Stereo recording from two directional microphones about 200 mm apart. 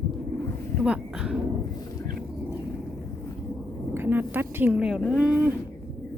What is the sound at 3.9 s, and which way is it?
Speech, 10° right (ahead or behind).